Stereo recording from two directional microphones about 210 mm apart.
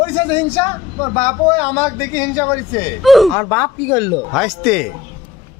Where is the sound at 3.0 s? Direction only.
Centre (ahead or behind).